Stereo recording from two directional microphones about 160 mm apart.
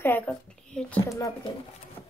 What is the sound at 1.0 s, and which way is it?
Speech, 20° left (ahead or behind).